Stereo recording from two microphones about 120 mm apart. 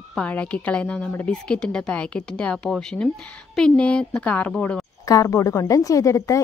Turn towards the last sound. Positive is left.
turn(degrees=25)  # may be behind; listen again after turning